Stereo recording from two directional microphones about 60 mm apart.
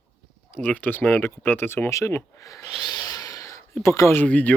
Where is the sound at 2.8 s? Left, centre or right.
Left.